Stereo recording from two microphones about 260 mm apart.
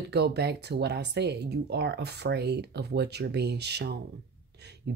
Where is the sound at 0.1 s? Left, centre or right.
Right.